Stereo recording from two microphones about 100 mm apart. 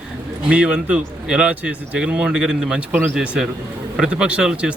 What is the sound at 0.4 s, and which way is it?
Speech, 10° right (ahead or behind).